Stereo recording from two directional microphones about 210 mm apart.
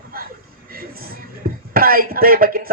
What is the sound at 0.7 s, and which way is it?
Speech, 45° right (ahead or behind).